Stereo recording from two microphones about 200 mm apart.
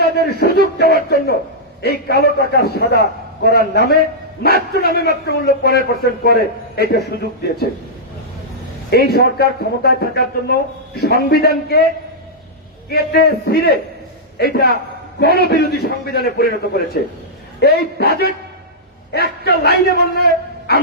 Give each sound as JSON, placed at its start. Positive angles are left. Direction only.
{"t": 0.0, "sound": "a man's voice", "side_deg": 55}
{"t": 8.9, "sound": "a man's voice", "side_deg": 50}
{"t": 12.9, "sound": "a man's voice", "side_deg": 50}